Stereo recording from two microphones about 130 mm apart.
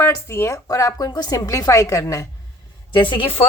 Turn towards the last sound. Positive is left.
turn(degrees=45)  # may be behind; listen again after turning